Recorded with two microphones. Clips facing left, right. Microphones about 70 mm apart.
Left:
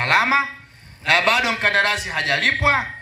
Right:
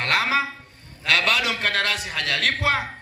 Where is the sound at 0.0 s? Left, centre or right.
Left.